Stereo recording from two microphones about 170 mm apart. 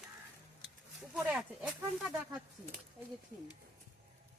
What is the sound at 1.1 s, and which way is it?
Speech, 5° right (ahead or behind).